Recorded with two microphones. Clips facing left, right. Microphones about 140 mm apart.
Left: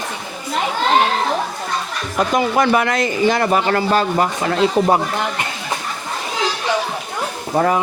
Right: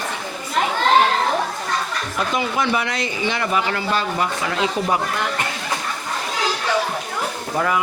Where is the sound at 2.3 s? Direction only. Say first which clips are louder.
Left 6 dB; 50° left (ahead or behind).